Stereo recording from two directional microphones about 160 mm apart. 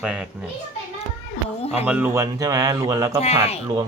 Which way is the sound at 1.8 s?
10° right (ahead or behind).